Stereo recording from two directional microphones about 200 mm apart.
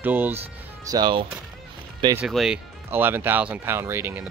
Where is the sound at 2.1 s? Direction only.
5° right (ahead or behind).